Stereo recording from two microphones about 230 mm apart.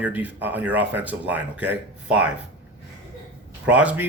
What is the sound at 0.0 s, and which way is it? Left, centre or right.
Speech, centre.